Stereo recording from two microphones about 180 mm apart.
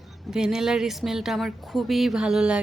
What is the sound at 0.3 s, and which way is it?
Speech, 5° right (ahead or behind).